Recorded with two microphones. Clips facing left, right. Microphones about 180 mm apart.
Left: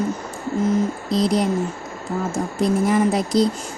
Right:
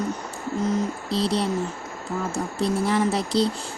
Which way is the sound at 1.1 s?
15° left (ahead or behind).